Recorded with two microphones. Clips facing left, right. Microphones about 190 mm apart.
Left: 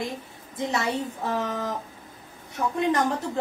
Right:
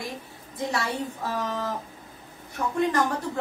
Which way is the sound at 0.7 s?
20° left (ahead or behind).